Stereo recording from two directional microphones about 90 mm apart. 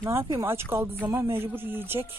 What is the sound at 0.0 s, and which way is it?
Speech, 30° right (ahead or behind).